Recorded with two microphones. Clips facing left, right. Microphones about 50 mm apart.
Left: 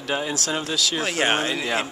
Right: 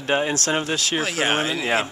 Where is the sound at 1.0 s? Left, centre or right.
Centre.